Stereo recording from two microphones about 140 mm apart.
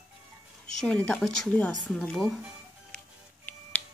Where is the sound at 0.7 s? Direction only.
5° left (ahead or behind).